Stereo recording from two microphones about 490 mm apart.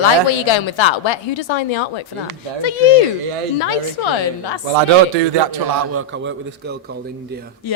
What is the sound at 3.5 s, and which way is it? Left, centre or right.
A woman's voice, left.